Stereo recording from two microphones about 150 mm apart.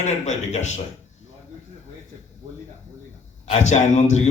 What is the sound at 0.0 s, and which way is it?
Speech, 50° left (ahead or behind).